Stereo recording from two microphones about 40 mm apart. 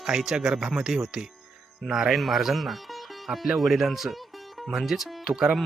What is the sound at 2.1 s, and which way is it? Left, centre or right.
Speech, centre.